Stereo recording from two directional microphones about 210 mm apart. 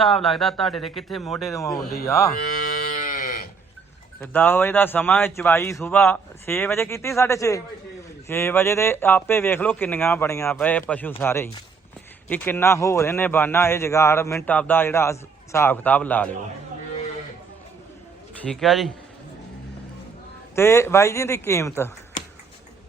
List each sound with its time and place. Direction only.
0.0 s speech: centre (ahead or behind)
1.5 s a man's voice: 15° left (ahead or behind)
3.0 s sheep: 40° left (ahead or behind)
4.2 s a man's voice: 10° left (ahead or behind)
18.4 s speech: centre (ahead or behind)
20.6 s a man's voice: 10° left (ahead or behind)